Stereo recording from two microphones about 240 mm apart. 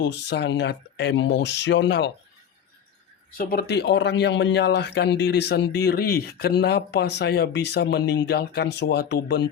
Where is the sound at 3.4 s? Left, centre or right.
Left.